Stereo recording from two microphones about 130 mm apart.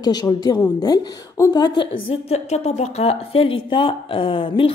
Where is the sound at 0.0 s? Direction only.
30° left (ahead or behind).